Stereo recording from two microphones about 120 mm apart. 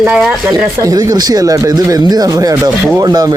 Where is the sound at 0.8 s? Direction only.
25° right (ahead or behind).